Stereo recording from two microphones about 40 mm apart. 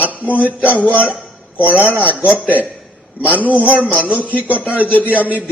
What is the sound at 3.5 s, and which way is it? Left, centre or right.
Speech, right.